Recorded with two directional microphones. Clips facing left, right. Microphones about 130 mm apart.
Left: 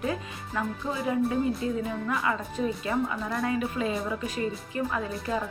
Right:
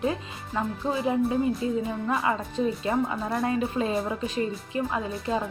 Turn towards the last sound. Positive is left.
turn(degrees=-20)  # may be behind; listen again after turning